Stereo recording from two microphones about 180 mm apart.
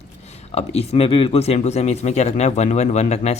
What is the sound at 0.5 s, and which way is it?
Speech, 35° left (ahead or behind).